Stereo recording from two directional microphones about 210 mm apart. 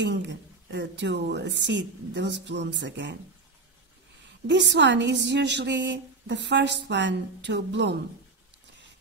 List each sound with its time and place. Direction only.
0.0 s a woman's voice: 60° right (ahead or behind)
4.5 s a woman's voice: 55° right (ahead or behind)